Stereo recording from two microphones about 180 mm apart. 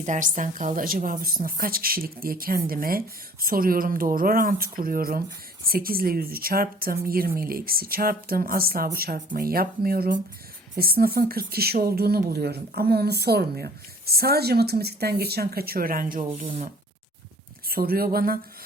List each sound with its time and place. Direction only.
0.0 s speech: 45° right (ahead or behind)
17.7 s speech: 55° right (ahead or behind)